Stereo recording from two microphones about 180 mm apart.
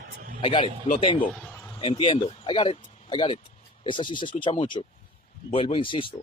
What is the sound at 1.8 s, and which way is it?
Speech, 30° left (ahead or behind).